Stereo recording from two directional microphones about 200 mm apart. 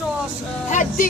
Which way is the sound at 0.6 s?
40° left (ahead or behind).